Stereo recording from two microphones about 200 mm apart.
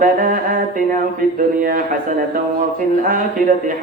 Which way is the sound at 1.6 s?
40° right (ahead or behind).